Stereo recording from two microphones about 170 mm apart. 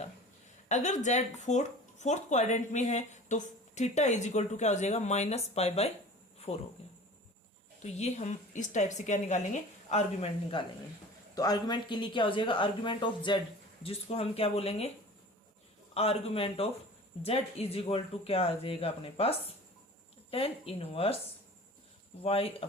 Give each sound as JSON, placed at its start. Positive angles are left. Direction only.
{"t": 0.7, "sound": "speech", "side_deg": 45}
{"t": 7.8, "sound": "speech", "side_deg": 40}
{"t": 11.3, "sound": "speech", "side_deg": 20}
{"t": 16.0, "sound": "speech", "side_deg": 35}
{"t": 22.2, "sound": "speech", "side_deg": 35}